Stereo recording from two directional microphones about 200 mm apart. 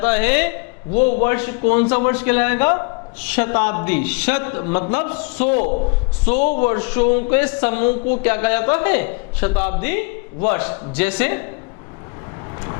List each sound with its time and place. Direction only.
0.0 s a man's voice: 10° left (ahead or behind)
5.5 s a man's voice: 45° left (ahead or behind)
6.2 s speech: 10° left (ahead or behind)